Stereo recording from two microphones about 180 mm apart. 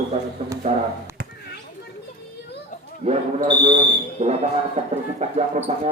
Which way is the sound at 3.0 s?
40° right (ahead or behind).